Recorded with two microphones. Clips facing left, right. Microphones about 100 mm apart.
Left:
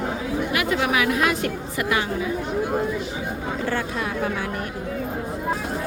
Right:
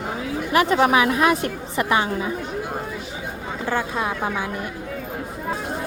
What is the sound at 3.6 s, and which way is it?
Speech, 20° right (ahead or behind).